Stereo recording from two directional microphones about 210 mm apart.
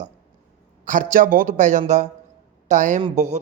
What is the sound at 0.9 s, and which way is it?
A woman's voice, 40° right (ahead or behind).